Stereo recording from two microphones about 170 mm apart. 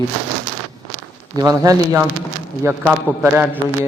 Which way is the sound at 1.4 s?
20° right (ahead or behind).